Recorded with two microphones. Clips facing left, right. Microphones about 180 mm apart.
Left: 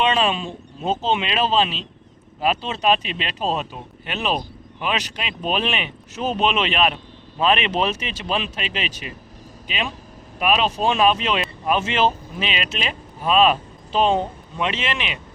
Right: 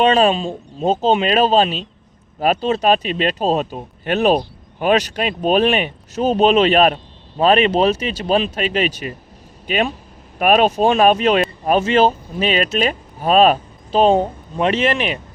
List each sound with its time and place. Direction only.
0.0 s speech: 40° right (ahead or behind)